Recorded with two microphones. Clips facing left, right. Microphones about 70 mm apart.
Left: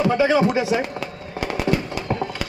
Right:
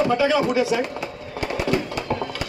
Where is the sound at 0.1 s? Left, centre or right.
Left.